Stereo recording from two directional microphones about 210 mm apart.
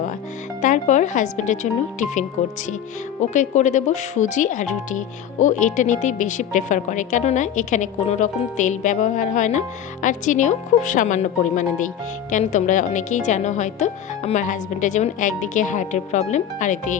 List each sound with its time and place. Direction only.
0.6 s speech: 35° left (ahead or behind)
3.2 s speech: 35° left (ahead or behind)